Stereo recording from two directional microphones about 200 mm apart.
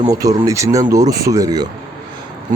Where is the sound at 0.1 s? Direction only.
15° right (ahead or behind).